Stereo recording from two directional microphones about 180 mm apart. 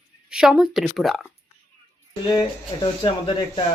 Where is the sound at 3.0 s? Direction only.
25° left (ahead or behind).